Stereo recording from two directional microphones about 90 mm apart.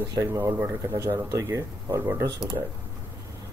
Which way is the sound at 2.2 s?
45° right (ahead or behind).